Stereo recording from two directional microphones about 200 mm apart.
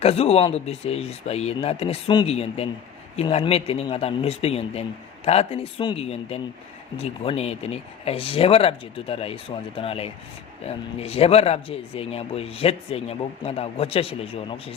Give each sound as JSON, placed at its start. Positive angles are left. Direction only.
{"t": 0.0, "sound": "speech", "side_deg": 30}